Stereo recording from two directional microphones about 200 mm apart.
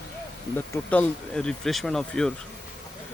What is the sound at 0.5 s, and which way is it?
Speech, 5° left (ahead or behind).